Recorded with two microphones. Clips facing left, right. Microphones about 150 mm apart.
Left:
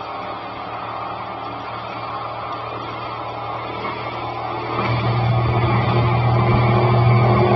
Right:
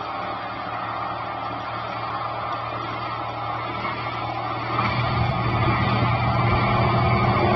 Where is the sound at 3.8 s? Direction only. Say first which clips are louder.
Left 3 dB; 20° left (ahead or behind).